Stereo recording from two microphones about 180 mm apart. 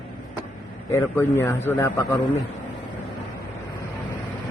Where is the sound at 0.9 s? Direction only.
15° left (ahead or behind).